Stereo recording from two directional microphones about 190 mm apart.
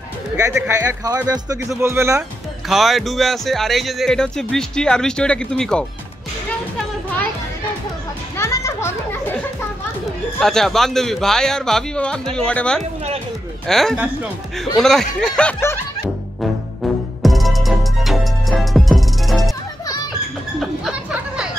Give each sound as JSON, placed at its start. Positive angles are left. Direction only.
{"t": 0.7, "sound": "speech", "side_deg": -15}
{"t": 2.7, "sound": "speech", "side_deg": 0}
{"t": 8.4, "sound": "a child's voice", "side_deg": 15}
{"t": 17.2, "sound": "music", "side_deg": 0}
{"t": 20.6, "sound": "a sound", "side_deg": 0}